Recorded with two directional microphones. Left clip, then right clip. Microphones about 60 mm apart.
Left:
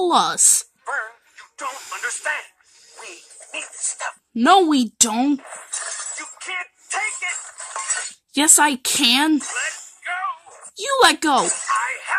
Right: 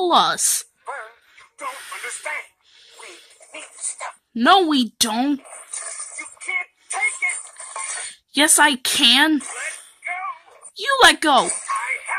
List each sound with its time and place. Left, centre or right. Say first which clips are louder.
0.0 s speech: right 1 dB; centre
0.8 s music: left 9 dB; left
1.7 s radio: left 3 dB; left
3.5 s dog: left 5 dB; centre
4.4 s a woman's voice: left 1 dB; left
6.1 s music: right 7 dB; centre
6.9 s shatter: right 2 dB; centre
8.5 s a woman's voice: even; centre
9.1 s speech: right 1 dB; centre
9.5 s jingle bell: left 4 dB; centre
10.8 s a sound: right 2 dB; centre